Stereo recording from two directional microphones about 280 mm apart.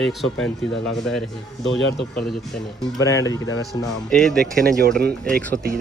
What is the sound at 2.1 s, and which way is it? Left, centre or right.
Speech, centre.